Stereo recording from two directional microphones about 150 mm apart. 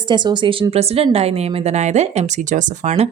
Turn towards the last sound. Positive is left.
turn(degrees=-50)  # may be behind; listen again after turning